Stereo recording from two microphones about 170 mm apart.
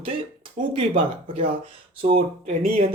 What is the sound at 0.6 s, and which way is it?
Speech, 40° right (ahead or behind).